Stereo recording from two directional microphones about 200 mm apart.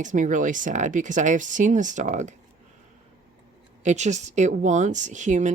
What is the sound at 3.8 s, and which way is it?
Speech, 35° right (ahead or behind).